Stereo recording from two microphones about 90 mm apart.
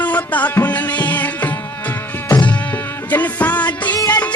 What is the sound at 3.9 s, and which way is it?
Music, 50° left (ahead or behind).